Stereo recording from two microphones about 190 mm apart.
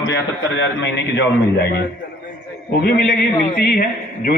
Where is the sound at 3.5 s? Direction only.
55° left (ahead or behind).